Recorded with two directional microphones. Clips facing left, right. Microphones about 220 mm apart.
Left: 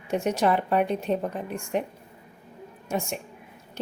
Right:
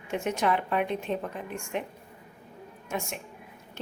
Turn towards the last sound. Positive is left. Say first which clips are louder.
# left 5 dB
turn(degrees=35)  # may be behind; listen again after turning